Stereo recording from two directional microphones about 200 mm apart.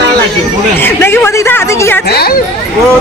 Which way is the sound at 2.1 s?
50° left (ahead or behind).